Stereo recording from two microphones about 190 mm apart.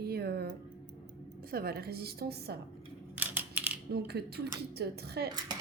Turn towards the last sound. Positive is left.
turn(degrees=-55)  # may be behind; listen again after turning